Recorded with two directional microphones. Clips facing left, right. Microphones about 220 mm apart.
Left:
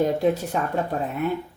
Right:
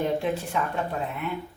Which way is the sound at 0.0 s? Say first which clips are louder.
Left 5 dB; 40° left (ahead or behind).